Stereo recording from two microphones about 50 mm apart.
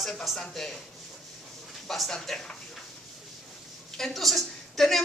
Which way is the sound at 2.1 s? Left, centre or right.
Centre.